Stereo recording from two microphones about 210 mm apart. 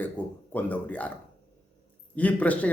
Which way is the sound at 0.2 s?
10° left (ahead or behind).